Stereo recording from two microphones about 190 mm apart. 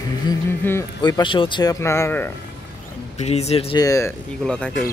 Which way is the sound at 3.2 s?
35° left (ahead or behind).